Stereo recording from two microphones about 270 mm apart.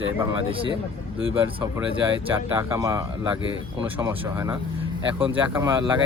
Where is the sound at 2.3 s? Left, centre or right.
Centre.